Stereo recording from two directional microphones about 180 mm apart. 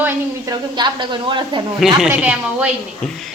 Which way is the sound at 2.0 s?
10° right (ahead or behind).